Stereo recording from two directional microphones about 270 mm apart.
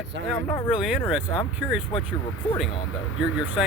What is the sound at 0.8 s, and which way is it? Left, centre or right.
Speech, centre.